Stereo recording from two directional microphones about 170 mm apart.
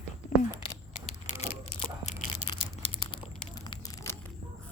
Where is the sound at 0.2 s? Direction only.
45° left (ahead or behind).